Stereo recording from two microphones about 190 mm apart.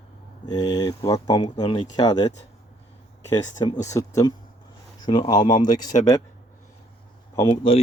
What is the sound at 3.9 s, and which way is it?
Speech, 15° left (ahead or behind).